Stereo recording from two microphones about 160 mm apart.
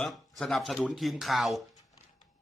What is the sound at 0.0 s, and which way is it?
Speech, centre (ahead or behind).